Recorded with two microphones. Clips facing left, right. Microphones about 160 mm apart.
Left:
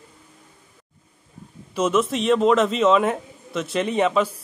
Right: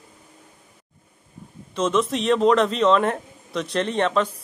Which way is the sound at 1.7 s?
5° left (ahead or behind).